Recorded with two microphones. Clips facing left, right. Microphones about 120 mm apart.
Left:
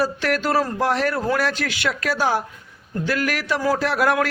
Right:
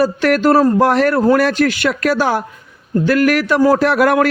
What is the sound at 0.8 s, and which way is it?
A man's voice, 60° right (ahead or behind).